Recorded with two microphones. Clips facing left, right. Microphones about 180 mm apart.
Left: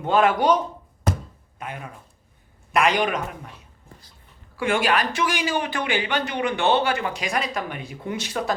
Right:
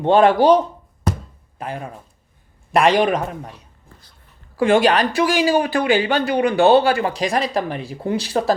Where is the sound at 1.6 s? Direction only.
35° right (ahead or behind).